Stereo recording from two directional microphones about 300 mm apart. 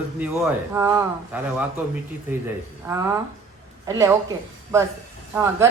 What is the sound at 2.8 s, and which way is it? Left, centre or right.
Speech, centre.